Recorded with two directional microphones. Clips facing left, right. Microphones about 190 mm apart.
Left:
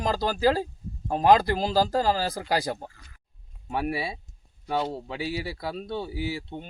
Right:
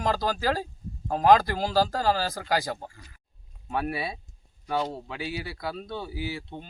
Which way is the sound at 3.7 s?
15° left (ahead or behind).